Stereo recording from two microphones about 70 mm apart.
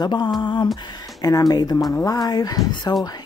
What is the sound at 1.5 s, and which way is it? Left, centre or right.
Speech, left.